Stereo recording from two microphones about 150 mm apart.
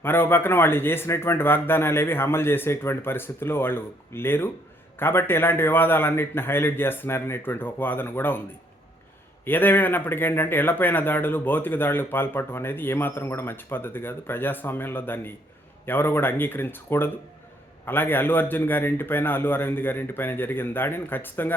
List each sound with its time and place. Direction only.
0.0 s speech: 15° left (ahead or behind)
9.4 s speech: 15° left (ahead or behind)